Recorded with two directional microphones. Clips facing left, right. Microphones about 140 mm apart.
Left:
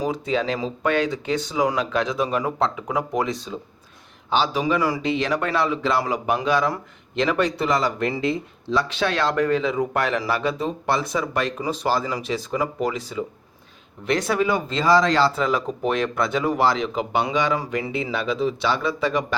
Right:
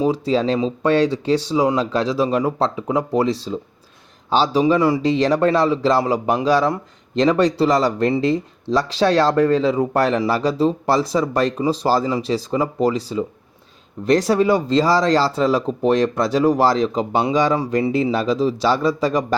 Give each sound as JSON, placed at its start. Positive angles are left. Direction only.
{"t": 0.0, "sound": "speech", "side_deg": -30}